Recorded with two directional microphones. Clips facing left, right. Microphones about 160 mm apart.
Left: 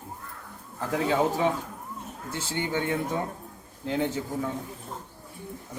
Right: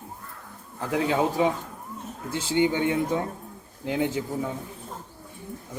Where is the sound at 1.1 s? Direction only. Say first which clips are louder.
Even; 15° right (ahead or behind).